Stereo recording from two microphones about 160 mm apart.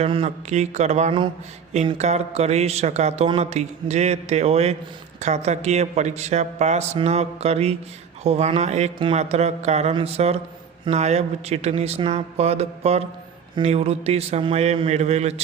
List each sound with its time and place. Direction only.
0.0 s speech: 40° right (ahead or behind)